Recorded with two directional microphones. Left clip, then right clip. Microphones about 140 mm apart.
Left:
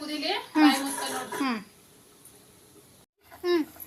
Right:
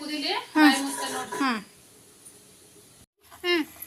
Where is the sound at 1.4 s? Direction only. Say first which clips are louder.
Right 4 dB; 5° left (ahead or behind).